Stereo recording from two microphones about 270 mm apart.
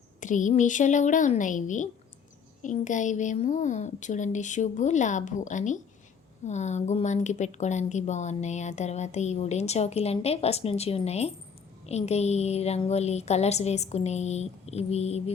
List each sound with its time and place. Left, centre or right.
0.2 s speech: left